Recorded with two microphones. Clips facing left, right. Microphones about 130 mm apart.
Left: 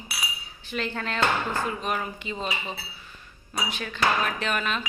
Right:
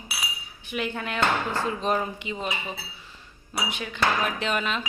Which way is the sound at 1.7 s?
30° right (ahead or behind).